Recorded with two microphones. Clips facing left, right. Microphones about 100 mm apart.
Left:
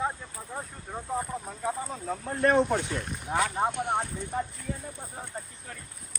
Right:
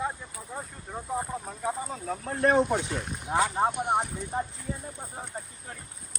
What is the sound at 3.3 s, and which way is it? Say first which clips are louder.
Speech: right 2 dB; 20° right (ahead or behind).